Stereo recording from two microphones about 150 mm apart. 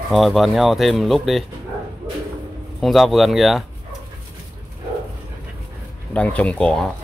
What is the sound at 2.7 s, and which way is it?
Speech, centre (ahead or behind).